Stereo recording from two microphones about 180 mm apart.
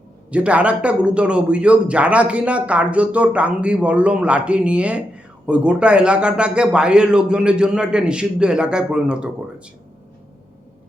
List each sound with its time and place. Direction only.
0.3 s a man's voice: 5° right (ahead or behind)